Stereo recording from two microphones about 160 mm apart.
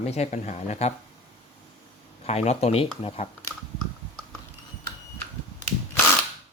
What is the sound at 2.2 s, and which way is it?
Speech, 40° left (ahead or behind).